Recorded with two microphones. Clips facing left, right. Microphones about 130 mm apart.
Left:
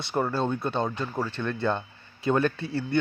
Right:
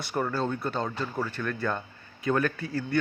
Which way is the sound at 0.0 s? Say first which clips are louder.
Left 2 dB; 25° left (ahead or behind).